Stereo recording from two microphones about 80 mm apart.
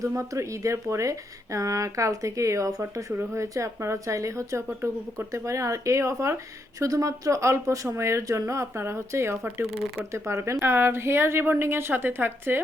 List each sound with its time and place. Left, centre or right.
0.0 s speech: right
2.9 s speech: right